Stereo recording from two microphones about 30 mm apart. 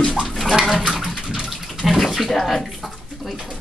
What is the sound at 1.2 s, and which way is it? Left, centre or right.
Bathtub, centre.